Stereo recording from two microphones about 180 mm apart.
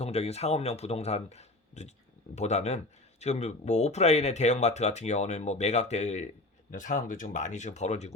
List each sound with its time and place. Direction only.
0.0 s speech: 35° left (ahead or behind)